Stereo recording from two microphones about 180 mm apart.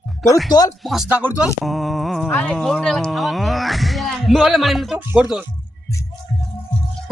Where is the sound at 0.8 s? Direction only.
Centre (ahead or behind).